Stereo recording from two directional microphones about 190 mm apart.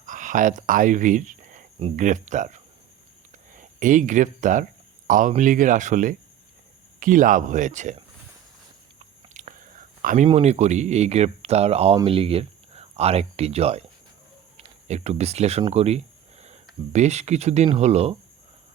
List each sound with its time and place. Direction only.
0.0 s speech: 40° right (ahead or behind)
9.3 s whispering: 40° right (ahead or behind)
10.0 s speech: 45° right (ahead or behind)
10.2 s speech: 35° right (ahead or behind)